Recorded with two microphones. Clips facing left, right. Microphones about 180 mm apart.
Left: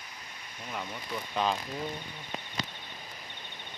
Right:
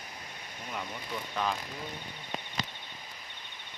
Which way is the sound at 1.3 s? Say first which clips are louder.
Left 3 dB; 20° left (ahead or behind).